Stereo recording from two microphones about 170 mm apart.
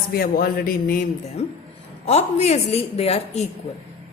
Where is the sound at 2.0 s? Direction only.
40° left (ahead or behind).